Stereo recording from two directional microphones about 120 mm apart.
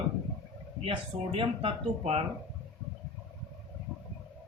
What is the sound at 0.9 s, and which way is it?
Speech, 45° right (ahead or behind).